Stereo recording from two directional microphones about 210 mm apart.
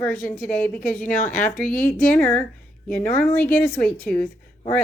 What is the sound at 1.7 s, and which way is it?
Speech, 40° left (ahead or behind).